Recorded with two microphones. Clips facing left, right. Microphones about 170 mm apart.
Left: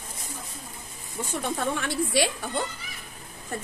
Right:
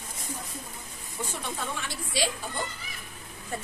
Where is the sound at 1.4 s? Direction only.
55° left (ahead or behind).